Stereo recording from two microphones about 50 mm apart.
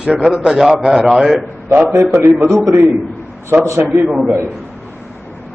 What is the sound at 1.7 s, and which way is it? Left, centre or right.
Speech, right.